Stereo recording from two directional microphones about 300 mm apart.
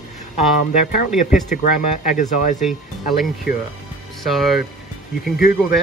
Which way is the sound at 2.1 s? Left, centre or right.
Left.